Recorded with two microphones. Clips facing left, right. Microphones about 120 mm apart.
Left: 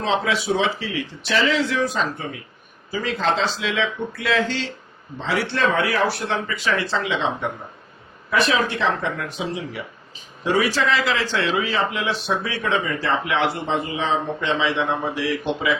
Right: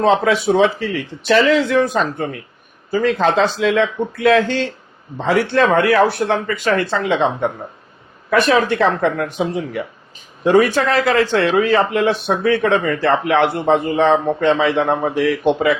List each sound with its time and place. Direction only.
0.0 s speech: 55° right (ahead or behind)